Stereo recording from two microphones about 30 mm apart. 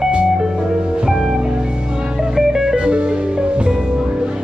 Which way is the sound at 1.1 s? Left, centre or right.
Centre.